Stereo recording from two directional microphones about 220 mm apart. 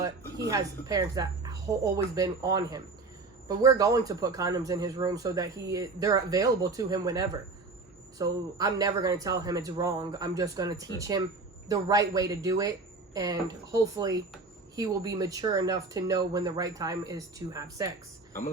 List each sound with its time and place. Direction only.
0.0 s a man's voice: 15° right (ahead or behind)